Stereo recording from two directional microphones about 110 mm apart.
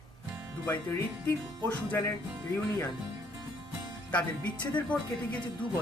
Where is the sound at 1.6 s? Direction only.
10° left (ahead or behind).